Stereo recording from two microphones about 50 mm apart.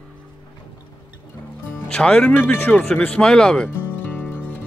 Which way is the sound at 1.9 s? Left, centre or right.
Centre.